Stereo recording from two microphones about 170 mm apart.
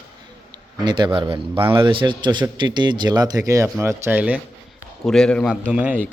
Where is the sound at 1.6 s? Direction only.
15° right (ahead or behind).